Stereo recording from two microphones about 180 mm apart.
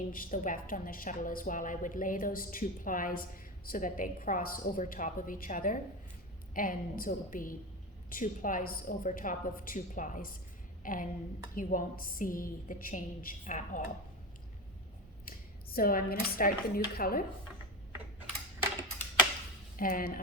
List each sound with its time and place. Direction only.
0.1 s a woman's voice: 50° left (ahead or behind)
15.2 s speech: 50° left (ahead or behind)
19.7 s a woman's voice: 50° left (ahead or behind)